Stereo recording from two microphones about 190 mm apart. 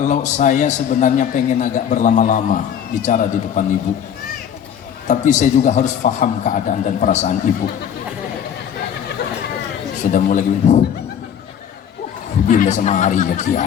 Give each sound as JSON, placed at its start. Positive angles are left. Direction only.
{"t": 0.0, "sound": "a man's voice", "side_deg": 40}
{"t": 5.0, "sound": "a man's voice", "side_deg": 40}
{"t": 10.0, "sound": "a man's voice", "side_deg": 40}
{"t": 12.5, "sound": "a man's voice", "side_deg": 40}